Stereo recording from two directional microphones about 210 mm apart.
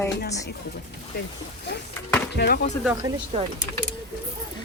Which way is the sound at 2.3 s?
50° left (ahead or behind).